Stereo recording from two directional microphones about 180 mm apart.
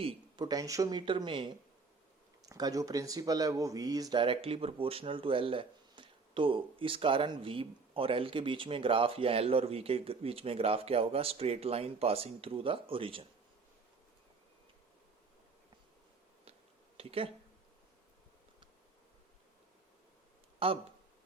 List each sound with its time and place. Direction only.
0.0 s speech: 25° right (ahead or behind)
17.0 s speech: 30° right (ahead or behind)
20.6 s speech: 30° right (ahead or behind)